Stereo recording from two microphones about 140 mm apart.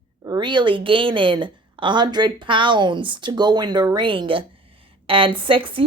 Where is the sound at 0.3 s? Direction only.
35° right (ahead or behind).